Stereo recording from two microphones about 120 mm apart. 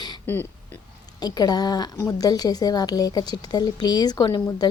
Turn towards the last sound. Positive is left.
turn(degrees=35)  # may be behind; listen again after turning